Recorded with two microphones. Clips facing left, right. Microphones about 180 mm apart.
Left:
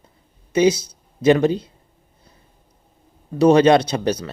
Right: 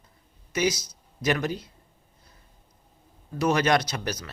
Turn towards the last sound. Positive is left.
turn(degrees=30)  # may be behind; listen again after turning